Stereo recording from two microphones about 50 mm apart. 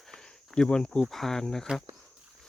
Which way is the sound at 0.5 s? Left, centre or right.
Centre.